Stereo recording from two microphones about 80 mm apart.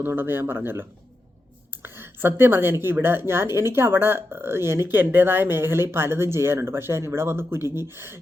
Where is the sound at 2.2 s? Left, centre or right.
Right.